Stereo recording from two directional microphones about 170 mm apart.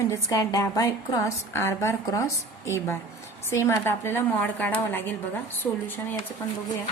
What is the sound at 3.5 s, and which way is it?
Speech, 15° left (ahead or behind).